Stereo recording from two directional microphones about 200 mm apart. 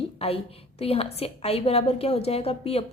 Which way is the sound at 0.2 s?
30° left (ahead or behind).